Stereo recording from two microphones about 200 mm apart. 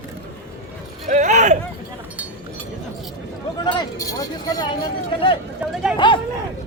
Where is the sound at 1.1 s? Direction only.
35° right (ahead or behind).